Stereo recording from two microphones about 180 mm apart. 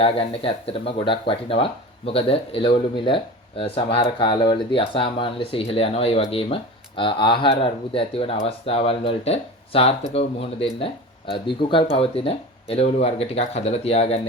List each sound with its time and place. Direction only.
0.0 s speech: 30° left (ahead or behind)